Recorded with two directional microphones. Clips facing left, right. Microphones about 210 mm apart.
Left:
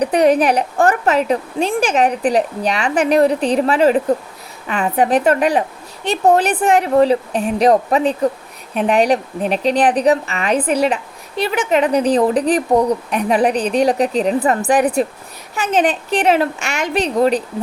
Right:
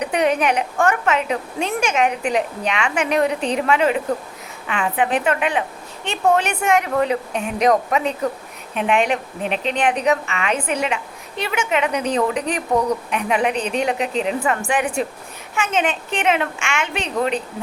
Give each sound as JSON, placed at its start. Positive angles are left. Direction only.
{"t": 0.0, "sound": "a woman's voice", "side_deg": 35}